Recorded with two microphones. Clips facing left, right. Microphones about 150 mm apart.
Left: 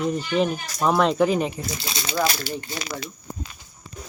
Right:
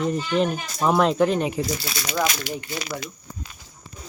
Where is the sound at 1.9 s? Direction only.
30° left (ahead or behind).